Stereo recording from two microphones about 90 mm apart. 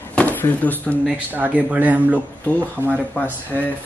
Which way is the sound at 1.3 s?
20° right (ahead or behind).